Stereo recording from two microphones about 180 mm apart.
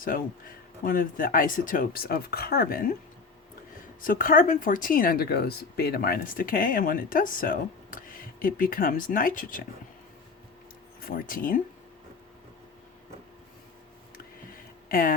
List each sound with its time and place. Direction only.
0.9 s speech: 50° left (ahead or behind)
4.0 s speech: 50° left (ahead or behind)
11.0 s speech: 50° left (ahead or behind)
14.8 s speech: 50° left (ahead or behind)